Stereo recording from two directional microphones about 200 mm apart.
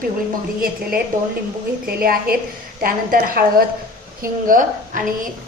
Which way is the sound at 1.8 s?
45° right (ahead or behind).